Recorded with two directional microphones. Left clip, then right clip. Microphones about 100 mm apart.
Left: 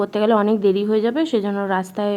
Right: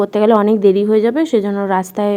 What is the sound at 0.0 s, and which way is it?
A woman's voice, 40° right (ahead or behind).